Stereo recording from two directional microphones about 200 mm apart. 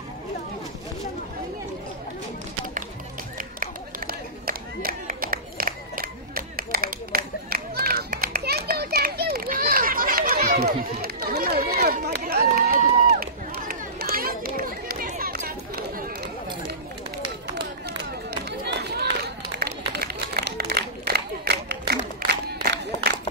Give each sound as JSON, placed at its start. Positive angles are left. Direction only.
{"t": 3.3, "sound": "run", "side_deg": -45}
{"t": 12.5, "sound": "a sound", "side_deg": -45}
{"t": 17.5, "sound": "run", "side_deg": -55}